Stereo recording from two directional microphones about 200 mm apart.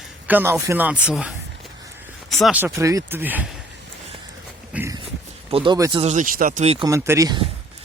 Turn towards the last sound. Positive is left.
turn(degrees=-20)  # may be behind; listen again after turning